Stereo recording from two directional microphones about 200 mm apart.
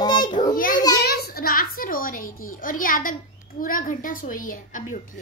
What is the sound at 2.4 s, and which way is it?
A woman's voice, 45° left (ahead or behind).